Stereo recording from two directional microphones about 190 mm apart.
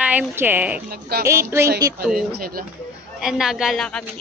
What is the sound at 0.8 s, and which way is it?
Speech, 55° right (ahead or behind).